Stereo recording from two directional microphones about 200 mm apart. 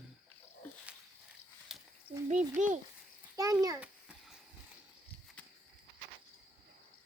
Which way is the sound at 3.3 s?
15° right (ahead or behind).